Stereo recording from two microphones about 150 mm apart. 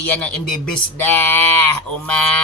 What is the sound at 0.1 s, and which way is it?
Speech, 10° left (ahead or behind).